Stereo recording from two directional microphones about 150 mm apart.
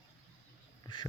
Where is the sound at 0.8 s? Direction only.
30° left (ahead or behind).